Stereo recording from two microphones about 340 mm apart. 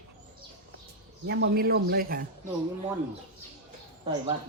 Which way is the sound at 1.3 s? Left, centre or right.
Right.